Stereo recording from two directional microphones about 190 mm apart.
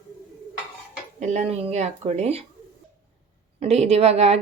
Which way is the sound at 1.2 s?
35° right (ahead or behind).